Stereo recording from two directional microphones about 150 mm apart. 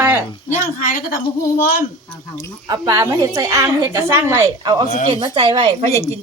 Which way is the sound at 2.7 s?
20° right (ahead or behind).